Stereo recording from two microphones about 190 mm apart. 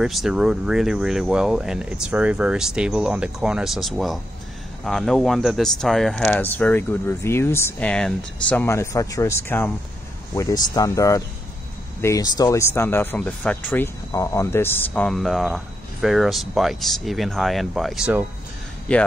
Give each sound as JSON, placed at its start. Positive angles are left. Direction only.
{"t": 0.0, "sound": "speech", "side_deg": 0}